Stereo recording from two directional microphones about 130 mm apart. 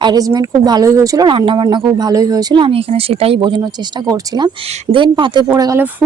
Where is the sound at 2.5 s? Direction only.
45° right (ahead or behind).